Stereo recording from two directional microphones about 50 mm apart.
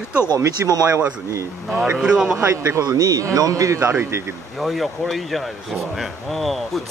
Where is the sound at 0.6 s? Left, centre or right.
Right.